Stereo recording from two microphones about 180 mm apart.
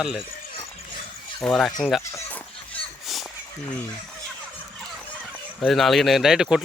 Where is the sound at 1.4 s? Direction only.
5° left (ahead or behind).